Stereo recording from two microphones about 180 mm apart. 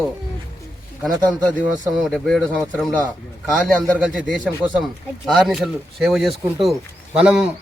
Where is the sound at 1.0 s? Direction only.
10° left (ahead or behind).